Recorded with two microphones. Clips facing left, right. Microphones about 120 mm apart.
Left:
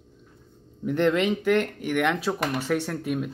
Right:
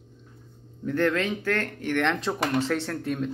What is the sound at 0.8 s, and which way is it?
Speech, 20° left (ahead or behind).